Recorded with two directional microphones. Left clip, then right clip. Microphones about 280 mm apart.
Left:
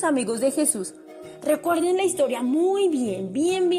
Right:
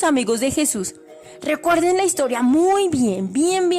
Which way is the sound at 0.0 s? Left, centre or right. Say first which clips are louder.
Right 4 dB; right.